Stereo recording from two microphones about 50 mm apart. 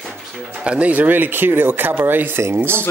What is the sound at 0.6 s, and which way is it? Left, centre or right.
Speech, right.